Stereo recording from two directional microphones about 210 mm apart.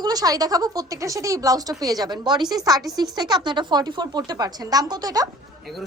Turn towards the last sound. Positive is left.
turn(degrees=-20)  # may be behind; listen again after turning